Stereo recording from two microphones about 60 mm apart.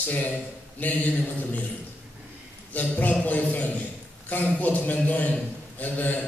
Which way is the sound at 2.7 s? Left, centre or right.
Left.